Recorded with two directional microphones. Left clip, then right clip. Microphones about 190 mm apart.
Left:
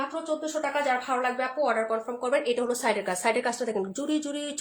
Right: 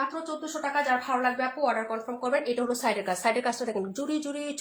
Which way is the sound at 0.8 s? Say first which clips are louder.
Right 2 dB; 30° left (ahead or behind).